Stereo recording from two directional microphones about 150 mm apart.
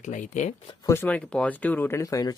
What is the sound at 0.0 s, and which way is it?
Speech, 55° left (ahead or behind).